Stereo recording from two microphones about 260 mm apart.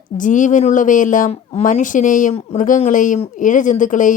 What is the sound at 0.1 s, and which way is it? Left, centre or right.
Speech, left.